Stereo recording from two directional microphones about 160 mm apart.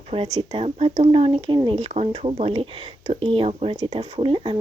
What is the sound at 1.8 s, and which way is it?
Speech, 40° right (ahead or behind).